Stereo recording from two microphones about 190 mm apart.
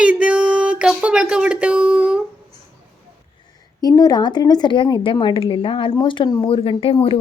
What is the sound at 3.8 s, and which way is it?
Speech, 20° left (ahead or behind).